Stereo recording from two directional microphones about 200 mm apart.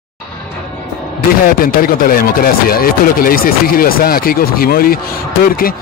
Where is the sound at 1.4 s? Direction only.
45° left (ahead or behind).